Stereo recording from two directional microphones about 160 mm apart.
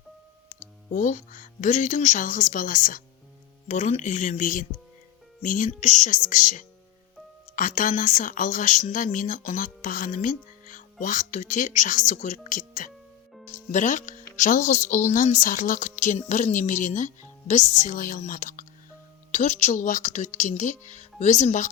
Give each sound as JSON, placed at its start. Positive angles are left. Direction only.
{"t": 0.9, "sound": "speech", "side_deg": 55}
{"t": 3.7, "sound": "a woman's voice", "side_deg": 45}